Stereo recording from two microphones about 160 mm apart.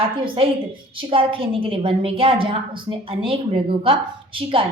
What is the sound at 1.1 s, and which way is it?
A woman's voice, 35° right (ahead or behind).